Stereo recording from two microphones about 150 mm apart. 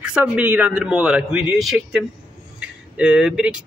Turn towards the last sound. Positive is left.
turn(degrees=-5)  # may be behind; listen again after turning